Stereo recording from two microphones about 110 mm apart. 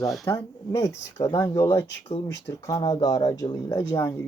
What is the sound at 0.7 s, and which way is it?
Speech, 30° left (ahead or behind).